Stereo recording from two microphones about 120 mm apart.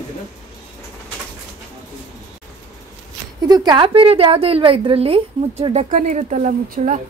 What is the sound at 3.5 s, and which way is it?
A woman's voice, 35° right (ahead or behind).